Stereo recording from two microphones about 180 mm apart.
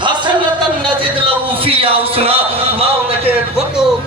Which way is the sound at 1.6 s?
30° right (ahead or behind).